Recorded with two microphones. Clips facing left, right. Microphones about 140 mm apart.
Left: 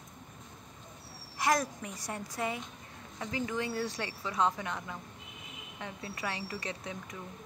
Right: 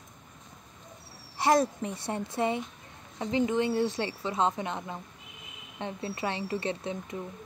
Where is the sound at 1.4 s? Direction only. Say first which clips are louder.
Right 6 dB; 30° right (ahead or behind).